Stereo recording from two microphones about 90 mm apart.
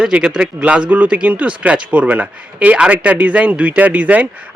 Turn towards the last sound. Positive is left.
turn(degrees=-15)  # may be behind; listen again after turning